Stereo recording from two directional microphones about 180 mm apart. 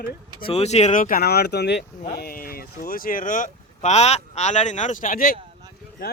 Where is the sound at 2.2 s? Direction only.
55° left (ahead or behind).